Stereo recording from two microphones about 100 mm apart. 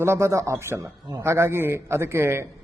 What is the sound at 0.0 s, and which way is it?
A man's voice, 30° right (ahead or behind).